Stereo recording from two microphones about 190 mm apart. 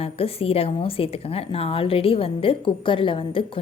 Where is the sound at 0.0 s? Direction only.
30° left (ahead or behind).